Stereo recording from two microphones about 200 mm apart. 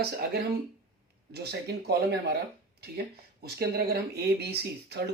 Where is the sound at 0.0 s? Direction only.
55° right (ahead or behind).